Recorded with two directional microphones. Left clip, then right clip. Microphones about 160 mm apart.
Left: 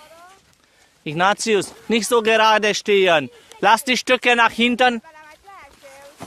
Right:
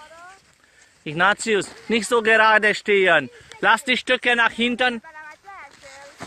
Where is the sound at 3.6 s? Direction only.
30° left (ahead or behind).